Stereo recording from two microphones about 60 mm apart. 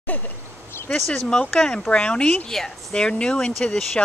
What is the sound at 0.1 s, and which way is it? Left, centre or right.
Speech, left.